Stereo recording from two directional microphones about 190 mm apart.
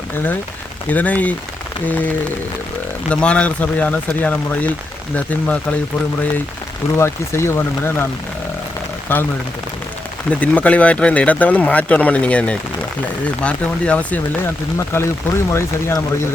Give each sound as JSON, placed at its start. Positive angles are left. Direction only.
{"t": 0.9, "sound": "speech", "side_deg": 10}
{"t": 6.9, "sound": "speech", "side_deg": 15}
{"t": 10.2, "sound": "speech", "side_deg": 10}